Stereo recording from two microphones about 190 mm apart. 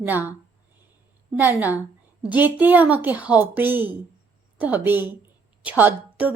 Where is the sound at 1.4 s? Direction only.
10° right (ahead or behind).